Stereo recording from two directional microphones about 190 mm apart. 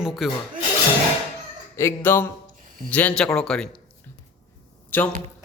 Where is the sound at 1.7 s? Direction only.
15° left (ahead or behind).